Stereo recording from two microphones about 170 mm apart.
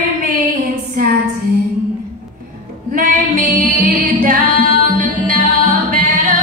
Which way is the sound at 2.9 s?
55° right (ahead or behind).